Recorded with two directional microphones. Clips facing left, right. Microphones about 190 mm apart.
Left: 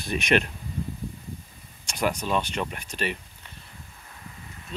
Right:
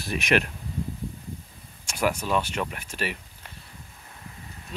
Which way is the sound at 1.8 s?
5° right (ahead or behind).